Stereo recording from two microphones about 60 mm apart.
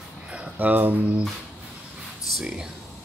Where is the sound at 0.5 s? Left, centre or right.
Right.